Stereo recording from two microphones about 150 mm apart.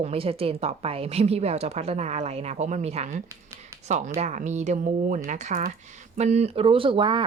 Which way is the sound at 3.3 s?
20° right (ahead or behind).